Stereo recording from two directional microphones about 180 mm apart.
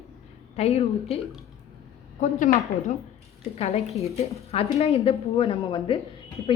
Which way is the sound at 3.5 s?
35° left (ahead or behind).